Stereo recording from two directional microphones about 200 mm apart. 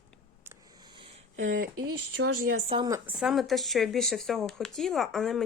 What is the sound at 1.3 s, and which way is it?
Speech, 80° right.